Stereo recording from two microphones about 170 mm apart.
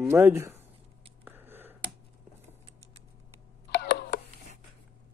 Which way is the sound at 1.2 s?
10° right (ahead or behind).